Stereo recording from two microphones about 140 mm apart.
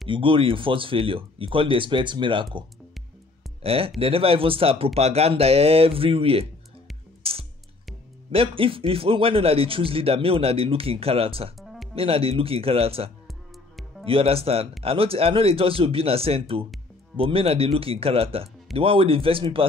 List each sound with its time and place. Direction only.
0.1 s speech: 40° right (ahead or behind)
3.6 s speech: 45° right (ahead or behind)
7.2 s music: 45° right (ahead or behind)
8.3 s speech: 40° right (ahead or behind)
11.6 s music: centre (ahead or behind)
11.9 s speech: 45° right (ahead or behind)